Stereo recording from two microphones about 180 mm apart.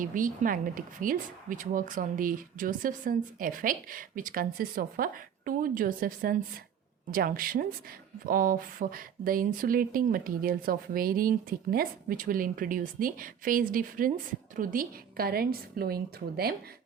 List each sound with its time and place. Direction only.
0.0 s a woman's voice: 50° right (ahead or behind)